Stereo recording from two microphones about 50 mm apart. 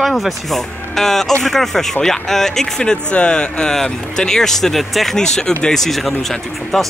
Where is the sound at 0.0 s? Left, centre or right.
Centre.